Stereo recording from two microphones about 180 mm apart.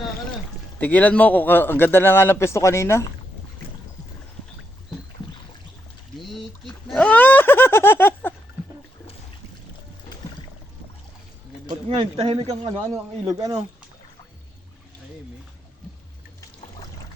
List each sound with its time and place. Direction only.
0.8 s a man's voice: 10° left (ahead or behind)
6.1 s speech: centre (ahead or behind)
11.9 s speech: 30° right (ahead or behind)
12.9 s speech: 20° right (ahead or behind)